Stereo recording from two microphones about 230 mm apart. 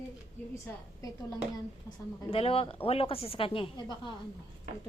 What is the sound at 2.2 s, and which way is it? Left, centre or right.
Speech, left.